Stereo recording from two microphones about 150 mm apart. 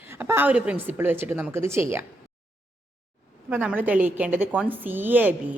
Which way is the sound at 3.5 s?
10° right (ahead or behind).